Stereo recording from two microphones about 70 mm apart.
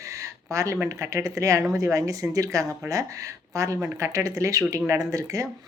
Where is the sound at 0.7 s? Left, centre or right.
Right.